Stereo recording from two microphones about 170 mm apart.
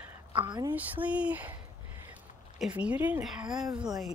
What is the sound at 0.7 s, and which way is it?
Speech, 10° right (ahead or behind).